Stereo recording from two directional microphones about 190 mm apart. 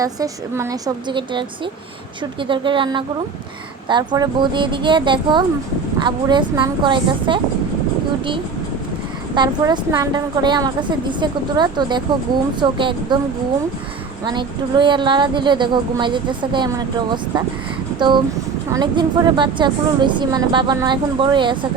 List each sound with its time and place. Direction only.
0.0 s a woman's voice: 15° right (ahead or behind)
9.3 s a woman's voice: 20° right (ahead or behind)
14.3 s a woman's voice: 25° right (ahead or behind)
18.7 s a woman's voice: 20° right (ahead or behind)